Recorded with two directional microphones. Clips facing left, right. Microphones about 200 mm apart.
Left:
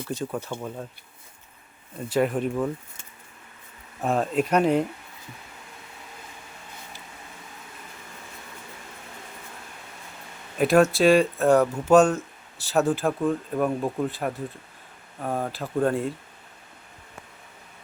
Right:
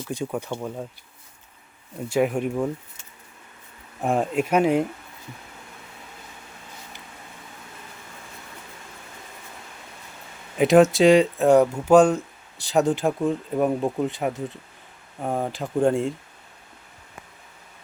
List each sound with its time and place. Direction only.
0.1 s speech: 10° right (ahead or behind)
2.0 s speech: 10° right (ahead or behind)
4.0 s speech: 15° right (ahead or behind)
10.6 s speech: 20° right (ahead or behind)